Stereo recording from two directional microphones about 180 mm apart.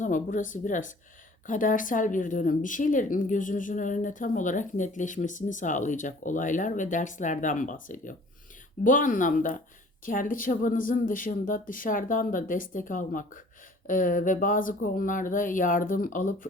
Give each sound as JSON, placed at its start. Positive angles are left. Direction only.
{"t": 0.0, "sound": "speech", "side_deg": 45}